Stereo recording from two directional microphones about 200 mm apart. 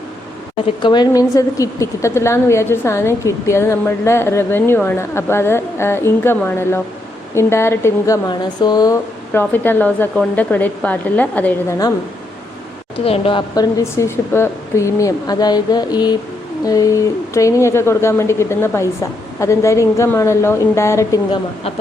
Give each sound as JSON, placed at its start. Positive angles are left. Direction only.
{"t": 0.8, "sound": "a woman's voice", "side_deg": 20}
{"t": 13.1, "sound": "a woman's voice", "side_deg": 25}